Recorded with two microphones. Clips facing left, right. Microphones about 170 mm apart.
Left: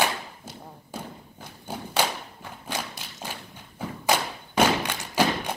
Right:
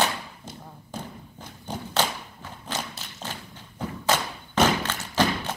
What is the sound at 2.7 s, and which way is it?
Clip-clop, 15° left (ahead or behind).